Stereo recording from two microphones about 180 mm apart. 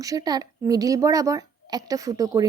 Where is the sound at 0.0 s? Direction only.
20° right (ahead or behind).